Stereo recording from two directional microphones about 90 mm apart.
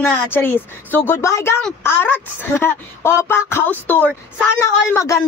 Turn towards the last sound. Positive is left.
turn(degrees=30)  # may be behind; listen again after turning